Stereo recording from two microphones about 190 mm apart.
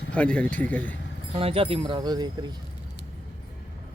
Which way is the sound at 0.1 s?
5° left (ahead or behind).